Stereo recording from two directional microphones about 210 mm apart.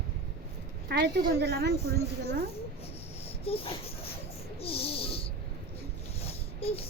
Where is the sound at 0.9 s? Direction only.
50° right (ahead or behind).